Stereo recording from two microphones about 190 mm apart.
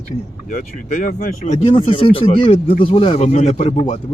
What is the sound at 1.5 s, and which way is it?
Speech, 30° left (ahead or behind).